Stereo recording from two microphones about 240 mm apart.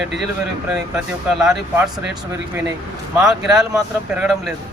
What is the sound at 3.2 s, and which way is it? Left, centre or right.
A man's voice, centre.